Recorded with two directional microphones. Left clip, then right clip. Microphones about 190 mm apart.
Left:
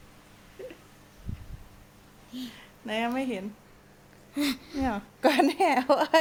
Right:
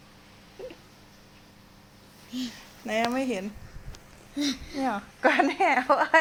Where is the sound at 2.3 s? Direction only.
25° right (ahead or behind).